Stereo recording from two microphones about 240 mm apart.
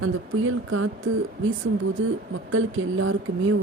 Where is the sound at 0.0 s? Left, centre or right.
Right.